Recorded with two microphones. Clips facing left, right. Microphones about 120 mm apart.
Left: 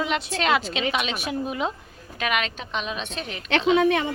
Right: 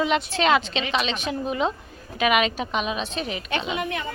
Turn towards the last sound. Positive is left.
turn(degrees=90)